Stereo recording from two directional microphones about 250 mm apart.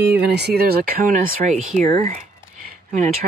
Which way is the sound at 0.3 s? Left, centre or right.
Right.